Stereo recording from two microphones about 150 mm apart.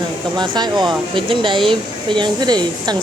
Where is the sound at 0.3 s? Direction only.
30° right (ahead or behind).